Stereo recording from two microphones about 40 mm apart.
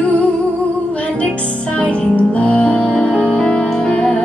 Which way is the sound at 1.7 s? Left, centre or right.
Left.